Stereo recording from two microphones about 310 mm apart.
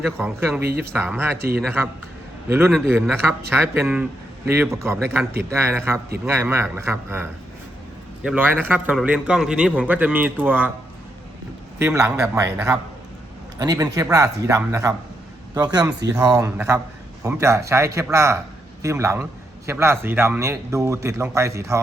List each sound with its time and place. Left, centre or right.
0.0 s a man's voice: centre
0.6 s speech: right
0.9 s a man's voice: centre
11.8 s a man's voice: centre